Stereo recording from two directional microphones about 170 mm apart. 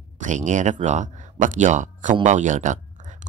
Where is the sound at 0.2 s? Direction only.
45° right (ahead or behind).